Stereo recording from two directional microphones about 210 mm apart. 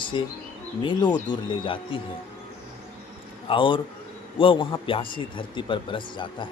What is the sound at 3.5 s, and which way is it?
Speech, 25° left (ahead or behind).